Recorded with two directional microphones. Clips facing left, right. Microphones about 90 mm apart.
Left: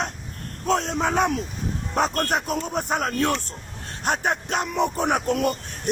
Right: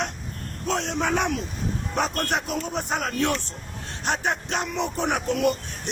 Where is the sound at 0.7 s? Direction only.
40° left (ahead or behind).